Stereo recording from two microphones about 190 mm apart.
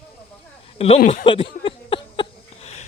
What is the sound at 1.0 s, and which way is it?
Speech, 50° left (ahead or behind).